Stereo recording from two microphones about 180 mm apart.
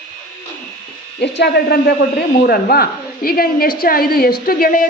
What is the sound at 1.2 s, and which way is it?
A man's voice, 65° left (ahead or behind).